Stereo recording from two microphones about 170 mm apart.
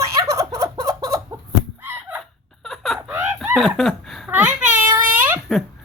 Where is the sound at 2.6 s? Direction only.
Centre (ahead or behind).